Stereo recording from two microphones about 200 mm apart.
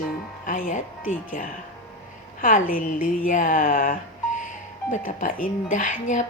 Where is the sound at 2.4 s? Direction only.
40° left (ahead or behind).